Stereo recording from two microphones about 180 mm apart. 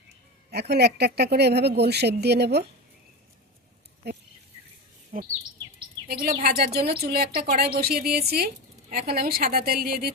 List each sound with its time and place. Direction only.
0.7 s speech: 65° right (ahead or behind)
5.1 s bird vocalization: 45° right (ahead or behind)
6.1 s speech: 55° right (ahead or behind)